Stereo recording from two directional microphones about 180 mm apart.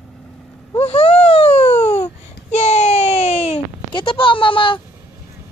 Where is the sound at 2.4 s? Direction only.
40° left (ahead or behind).